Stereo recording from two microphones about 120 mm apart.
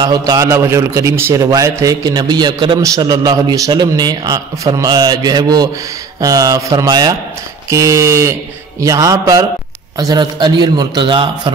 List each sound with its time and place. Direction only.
0.0 s a man's voice: 30° right (ahead or behind)